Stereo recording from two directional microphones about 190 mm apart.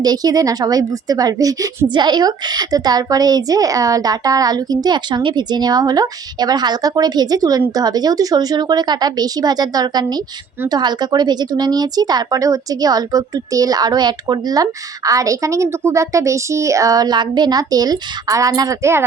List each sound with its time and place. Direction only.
0.0 s a woman's voice: 20° right (ahead or behind)